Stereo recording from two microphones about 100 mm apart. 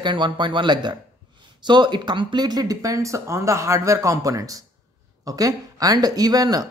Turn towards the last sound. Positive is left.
turn(degrees=-40)  # may be behind; listen again after turning